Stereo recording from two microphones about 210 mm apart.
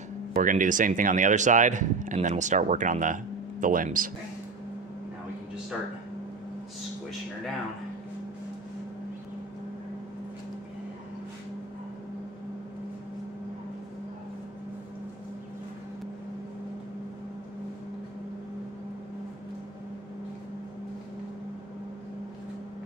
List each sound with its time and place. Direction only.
0.3 s speech: 40° right (ahead or behind)